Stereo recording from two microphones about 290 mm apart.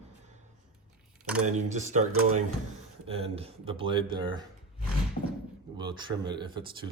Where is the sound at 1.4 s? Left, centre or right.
Right.